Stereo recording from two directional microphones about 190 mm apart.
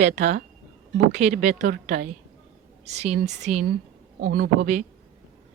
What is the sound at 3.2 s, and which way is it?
Speech, 60° right (ahead or behind).